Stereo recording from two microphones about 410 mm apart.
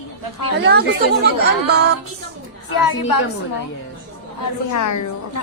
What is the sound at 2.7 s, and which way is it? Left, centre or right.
Speech, left.